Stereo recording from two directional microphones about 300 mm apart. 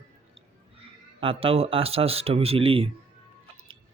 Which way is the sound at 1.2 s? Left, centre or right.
Centre.